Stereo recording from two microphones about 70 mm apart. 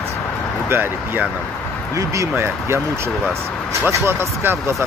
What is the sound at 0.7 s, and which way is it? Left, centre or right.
Speech, right.